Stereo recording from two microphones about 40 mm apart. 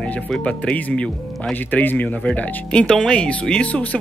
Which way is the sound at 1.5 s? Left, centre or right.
Left.